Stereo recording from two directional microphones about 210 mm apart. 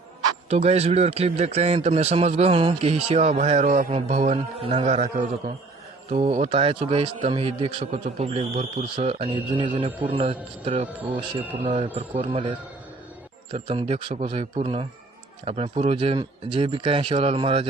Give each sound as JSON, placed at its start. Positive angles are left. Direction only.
{"t": 0.5, "sound": "a man's voice", "side_deg": -30}